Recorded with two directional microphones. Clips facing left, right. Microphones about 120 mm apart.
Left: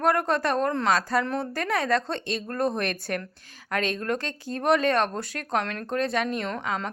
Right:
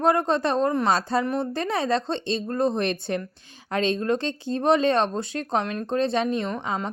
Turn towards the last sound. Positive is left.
turn(degrees=-20)  # may be behind; listen again after turning